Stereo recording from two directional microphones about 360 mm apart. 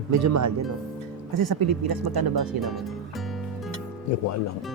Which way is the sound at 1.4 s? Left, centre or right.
Right.